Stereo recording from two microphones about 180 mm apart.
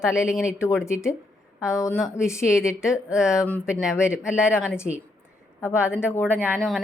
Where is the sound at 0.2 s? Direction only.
5° right (ahead or behind).